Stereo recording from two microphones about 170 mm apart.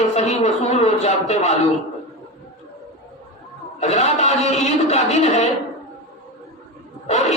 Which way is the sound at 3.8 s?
40° left (ahead or behind).